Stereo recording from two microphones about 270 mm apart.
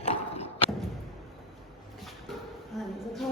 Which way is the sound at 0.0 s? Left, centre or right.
Left.